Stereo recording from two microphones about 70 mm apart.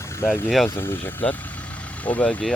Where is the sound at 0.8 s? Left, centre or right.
Left.